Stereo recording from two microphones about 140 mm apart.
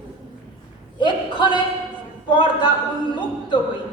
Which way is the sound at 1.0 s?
35° left (ahead or behind).